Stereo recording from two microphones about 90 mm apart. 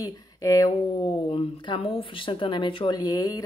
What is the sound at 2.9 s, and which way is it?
Speech, 50° left (ahead or behind).